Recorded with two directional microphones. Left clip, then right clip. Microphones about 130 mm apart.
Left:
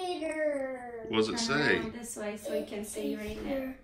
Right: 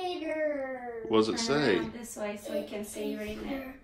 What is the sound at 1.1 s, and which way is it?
Speech, 15° right (ahead or behind).